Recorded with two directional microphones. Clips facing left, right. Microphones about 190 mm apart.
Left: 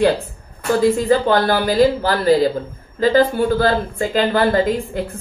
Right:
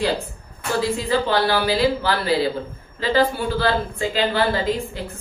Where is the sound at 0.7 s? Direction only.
45° left (ahead or behind).